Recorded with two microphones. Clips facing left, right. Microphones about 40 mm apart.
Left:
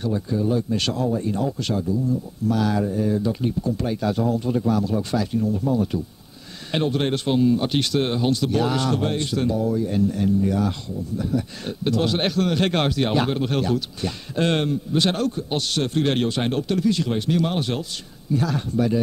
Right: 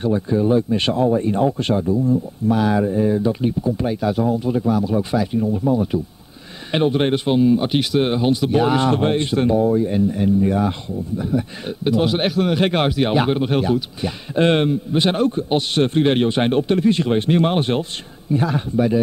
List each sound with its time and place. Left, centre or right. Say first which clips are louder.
0.0 s speech: right 5 dB; right